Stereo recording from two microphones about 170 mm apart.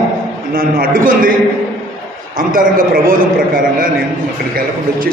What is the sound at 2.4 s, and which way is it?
Speech, 55° right (ahead or behind).